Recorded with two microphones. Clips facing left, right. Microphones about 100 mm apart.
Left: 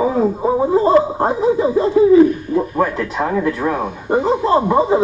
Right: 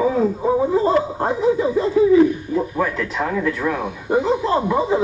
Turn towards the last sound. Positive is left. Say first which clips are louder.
# left 4 dB
turn(degrees=35)  # may be behind; listen again after turning